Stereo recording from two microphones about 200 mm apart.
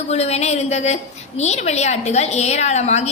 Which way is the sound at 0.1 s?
35° left (ahead or behind).